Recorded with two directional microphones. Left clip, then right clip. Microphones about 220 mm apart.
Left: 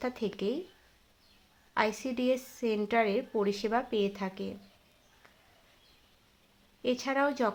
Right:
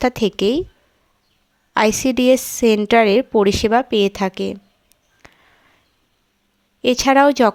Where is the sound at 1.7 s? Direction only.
50° right (ahead or behind).